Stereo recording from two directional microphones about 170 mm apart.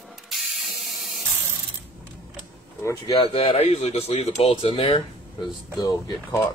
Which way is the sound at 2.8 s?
25° left (ahead or behind).